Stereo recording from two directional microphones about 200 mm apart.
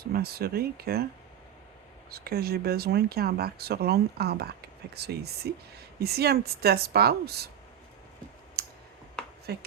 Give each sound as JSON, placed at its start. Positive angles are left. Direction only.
{"t": 0.0, "sound": "speech", "side_deg": -50}
{"t": 2.0, "sound": "speech", "side_deg": -50}
{"t": 8.6, "sound": "clicking", "side_deg": -50}
{"t": 9.5, "sound": "speech", "side_deg": -50}